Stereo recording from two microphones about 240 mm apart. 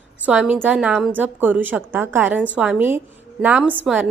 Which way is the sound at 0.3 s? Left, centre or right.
Centre.